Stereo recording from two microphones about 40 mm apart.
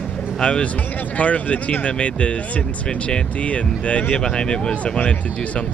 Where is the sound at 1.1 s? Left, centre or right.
Left.